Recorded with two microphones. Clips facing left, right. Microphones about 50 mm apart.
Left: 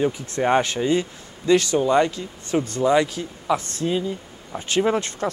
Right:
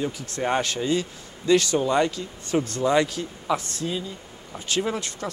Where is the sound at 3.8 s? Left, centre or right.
Centre.